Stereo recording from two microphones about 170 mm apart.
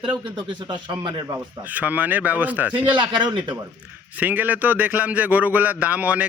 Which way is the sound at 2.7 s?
30° right (ahead or behind).